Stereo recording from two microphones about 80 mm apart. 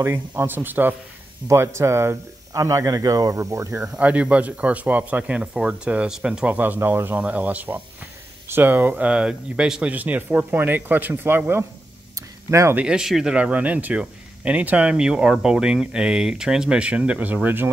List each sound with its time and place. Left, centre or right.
0.4 s speech: right
1.5 s speech: right
3.8 s speech: centre
6.6 s speech: right
12.2 s a sound: right
12.7 s speech: centre